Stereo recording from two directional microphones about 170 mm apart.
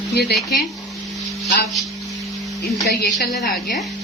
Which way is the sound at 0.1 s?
70° left (ahead or behind).